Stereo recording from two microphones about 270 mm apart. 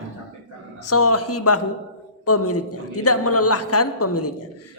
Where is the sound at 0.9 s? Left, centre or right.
Left.